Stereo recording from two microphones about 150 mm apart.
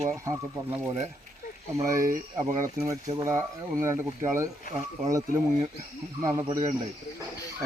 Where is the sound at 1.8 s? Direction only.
20° right (ahead or behind).